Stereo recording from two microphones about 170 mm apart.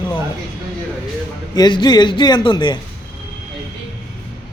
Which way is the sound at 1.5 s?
25° left (ahead or behind).